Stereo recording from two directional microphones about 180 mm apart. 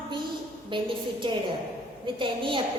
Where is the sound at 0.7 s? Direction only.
25° right (ahead or behind).